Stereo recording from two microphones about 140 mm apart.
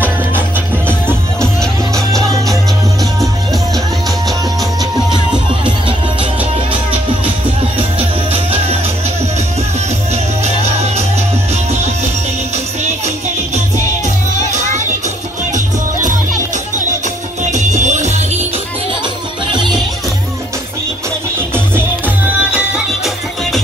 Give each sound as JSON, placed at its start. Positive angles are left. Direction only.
{"t": 1.4, "sound": "music", "side_deg": 5}
{"t": 10.4, "sound": "music", "side_deg": -50}
{"t": 17.4, "sound": "music", "side_deg": -60}
{"t": 21.7, "sound": "music", "side_deg": -10}